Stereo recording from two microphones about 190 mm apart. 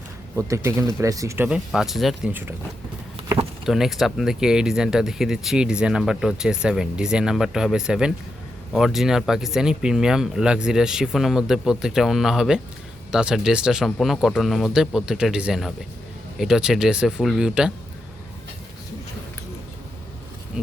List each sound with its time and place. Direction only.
0.3 s speech: 15° right (ahead or behind)
1.5 s speech: 5° right (ahead or behind)
3.2 s vehicle: 30° right (ahead or behind)
3.7 s speech: centre (ahead or behind)